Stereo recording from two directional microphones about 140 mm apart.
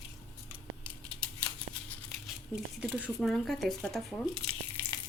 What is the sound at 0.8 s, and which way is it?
Scissors, 10° left (ahead or behind).